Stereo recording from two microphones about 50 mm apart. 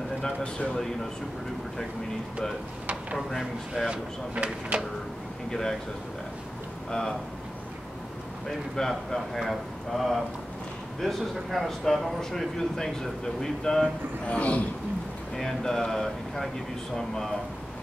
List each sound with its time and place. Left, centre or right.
0.2 s speech: left
3.2 s speech: centre
4.4 s speech: right
5.5 s speech: centre
6.9 s speech: centre
8.5 s speech: centre
14.2 s speech: left
15.3 s speech: centre